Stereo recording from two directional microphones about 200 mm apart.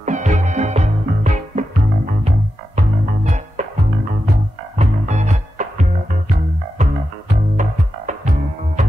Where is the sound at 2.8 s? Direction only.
35° right (ahead or behind).